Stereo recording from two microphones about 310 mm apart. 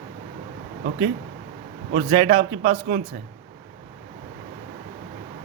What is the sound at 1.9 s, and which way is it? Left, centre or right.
A man's voice, right.